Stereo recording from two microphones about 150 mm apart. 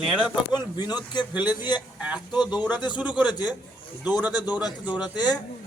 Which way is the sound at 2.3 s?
30° left (ahead or behind).